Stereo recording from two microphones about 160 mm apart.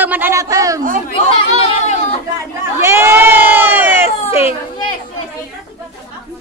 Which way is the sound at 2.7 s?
15° right (ahead or behind).